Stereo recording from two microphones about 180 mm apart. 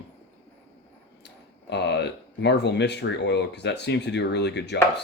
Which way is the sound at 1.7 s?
70° left (ahead or behind).